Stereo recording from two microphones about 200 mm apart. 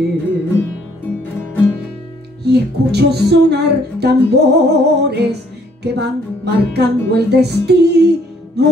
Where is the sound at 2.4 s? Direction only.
55° right (ahead or behind).